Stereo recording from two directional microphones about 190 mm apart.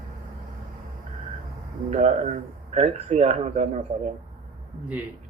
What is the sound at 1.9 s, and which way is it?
Speech, 35° right (ahead or behind).